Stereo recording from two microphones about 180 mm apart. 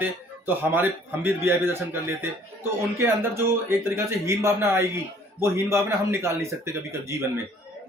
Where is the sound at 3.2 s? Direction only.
15° right (ahead or behind).